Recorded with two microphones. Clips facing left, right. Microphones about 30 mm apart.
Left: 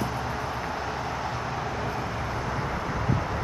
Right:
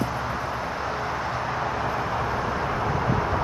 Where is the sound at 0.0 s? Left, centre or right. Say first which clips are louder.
Right 2 dB; centre.